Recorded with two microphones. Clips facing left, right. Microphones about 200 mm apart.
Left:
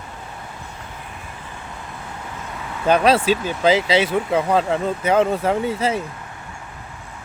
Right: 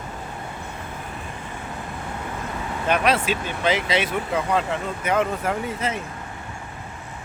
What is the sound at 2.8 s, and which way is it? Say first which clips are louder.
Speech: left 6 dB; 30° left (ahead or behind).